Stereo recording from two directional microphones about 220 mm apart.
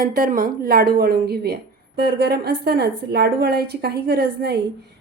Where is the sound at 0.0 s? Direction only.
40° right (ahead or behind).